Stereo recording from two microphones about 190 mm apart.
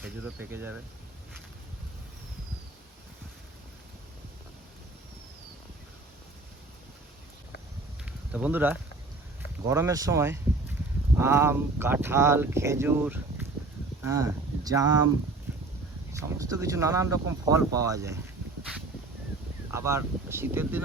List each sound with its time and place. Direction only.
0.0 s speech: 10° right (ahead or behind)
8.3 s speech: 5° right (ahead or behind)
16.4 s speech: 15° right (ahead or behind)
19.7 s speech: 15° right (ahead or behind)